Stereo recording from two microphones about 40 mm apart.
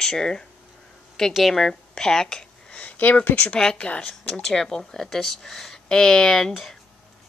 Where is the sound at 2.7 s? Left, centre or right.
Left.